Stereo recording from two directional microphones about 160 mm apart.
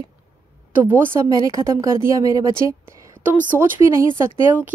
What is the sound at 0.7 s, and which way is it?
Speech, 15° right (ahead or behind).